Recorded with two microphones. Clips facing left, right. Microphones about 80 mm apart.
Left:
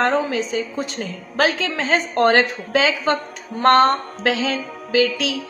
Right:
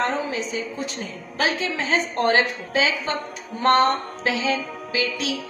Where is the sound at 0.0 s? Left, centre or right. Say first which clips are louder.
Left 5 dB; left.